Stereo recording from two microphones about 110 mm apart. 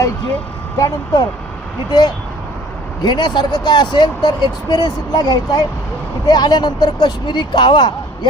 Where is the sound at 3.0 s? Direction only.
40° left (ahead or behind).